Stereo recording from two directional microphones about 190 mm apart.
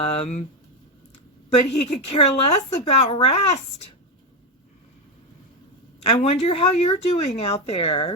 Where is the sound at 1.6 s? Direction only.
35° left (ahead or behind).